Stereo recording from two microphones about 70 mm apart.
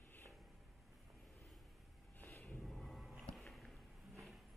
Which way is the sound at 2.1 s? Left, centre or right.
Left.